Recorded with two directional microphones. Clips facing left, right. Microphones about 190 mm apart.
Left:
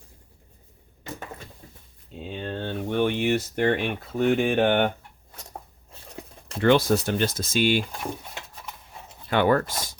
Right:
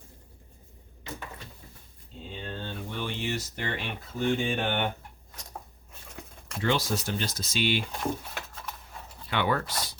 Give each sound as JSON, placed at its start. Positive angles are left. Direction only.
{"t": 2.3, "sound": "speech", "side_deg": 60}
{"t": 5.9, "sound": "a sound", "side_deg": 30}
{"t": 6.6, "sound": "speech", "side_deg": 60}
{"t": 9.3, "sound": "speech", "side_deg": 45}